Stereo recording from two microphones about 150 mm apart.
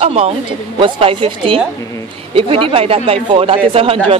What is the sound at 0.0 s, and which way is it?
A man's voice, 40° right (ahead or behind).